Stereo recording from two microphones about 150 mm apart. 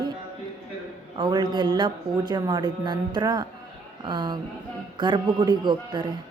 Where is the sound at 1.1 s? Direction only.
30° right (ahead or behind).